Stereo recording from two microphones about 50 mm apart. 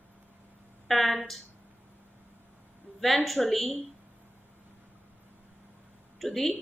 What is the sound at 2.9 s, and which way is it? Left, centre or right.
Speech, centre.